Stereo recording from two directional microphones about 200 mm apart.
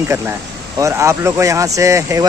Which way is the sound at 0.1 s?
15° right (ahead or behind).